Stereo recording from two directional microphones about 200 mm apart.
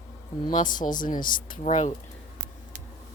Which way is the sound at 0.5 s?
40° left (ahead or behind).